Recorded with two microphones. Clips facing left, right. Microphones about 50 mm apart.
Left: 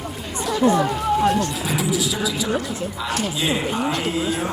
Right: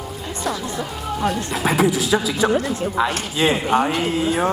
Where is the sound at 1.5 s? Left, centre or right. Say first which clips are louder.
Right 5 dB; right.